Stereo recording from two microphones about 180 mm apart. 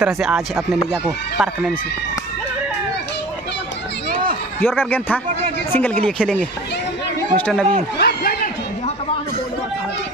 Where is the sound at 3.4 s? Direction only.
75° left (ahead or behind).